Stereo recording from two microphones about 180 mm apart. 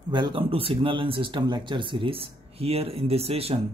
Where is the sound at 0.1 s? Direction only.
25° right (ahead or behind).